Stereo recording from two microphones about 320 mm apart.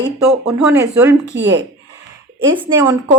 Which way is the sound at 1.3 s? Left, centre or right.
Right.